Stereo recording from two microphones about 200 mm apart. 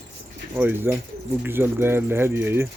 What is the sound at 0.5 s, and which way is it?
Speech, 10° right (ahead or behind).